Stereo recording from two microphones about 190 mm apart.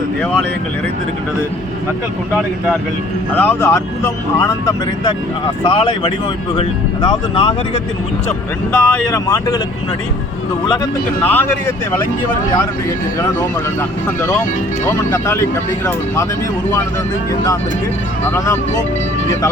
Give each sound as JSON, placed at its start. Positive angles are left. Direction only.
{"t": 3.3, "sound": "speech", "side_deg": 10}
{"t": 8.7, "sound": "speech", "side_deg": 15}
{"t": 11.2, "sound": "speech", "side_deg": 10}
{"t": 14.8, "sound": "speech", "side_deg": 15}
{"t": 18.3, "sound": "speech", "side_deg": 15}